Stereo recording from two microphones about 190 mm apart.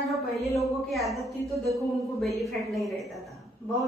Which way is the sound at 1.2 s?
15° right (ahead or behind).